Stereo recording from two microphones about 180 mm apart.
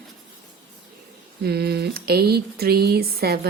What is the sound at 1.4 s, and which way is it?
Speech, 60° right (ahead or behind).